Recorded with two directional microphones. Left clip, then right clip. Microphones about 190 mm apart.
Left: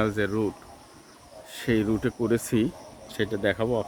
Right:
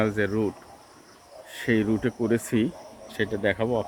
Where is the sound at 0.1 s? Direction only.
15° left (ahead or behind).